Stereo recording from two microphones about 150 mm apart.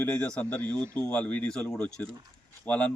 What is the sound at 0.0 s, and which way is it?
A man's voice, 10° left (ahead or behind).